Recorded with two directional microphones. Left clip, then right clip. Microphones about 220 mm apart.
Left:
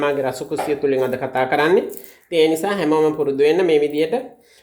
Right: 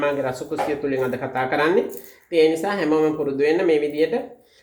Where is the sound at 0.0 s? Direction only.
35° left (ahead or behind).